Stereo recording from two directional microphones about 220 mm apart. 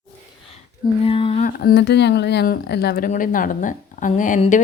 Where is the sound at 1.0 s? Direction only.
25° left (ahead or behind).